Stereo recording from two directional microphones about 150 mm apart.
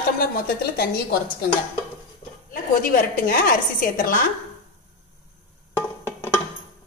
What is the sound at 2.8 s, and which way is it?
A woman's voice, 75° left (ahead or behind).